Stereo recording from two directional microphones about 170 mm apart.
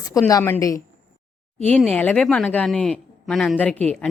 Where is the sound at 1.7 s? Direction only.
5° left (ahead or behind).